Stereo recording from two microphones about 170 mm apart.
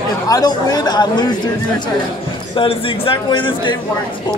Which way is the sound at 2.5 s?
30° left (ahead or behind).